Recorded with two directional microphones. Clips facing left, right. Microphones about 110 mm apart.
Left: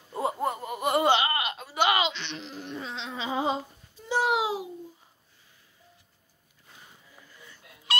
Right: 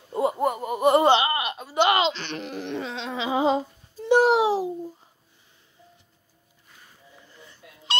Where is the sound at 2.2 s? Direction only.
60° right (ahead or behind); by 3.5 s 90° right.